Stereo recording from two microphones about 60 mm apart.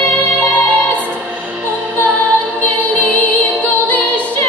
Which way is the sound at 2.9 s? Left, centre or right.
Left.